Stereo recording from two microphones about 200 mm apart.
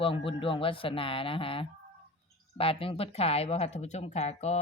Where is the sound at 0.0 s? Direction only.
25° left (ahead or behind).